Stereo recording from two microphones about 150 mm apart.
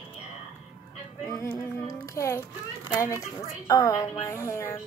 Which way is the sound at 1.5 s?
20° left (ahead or behind).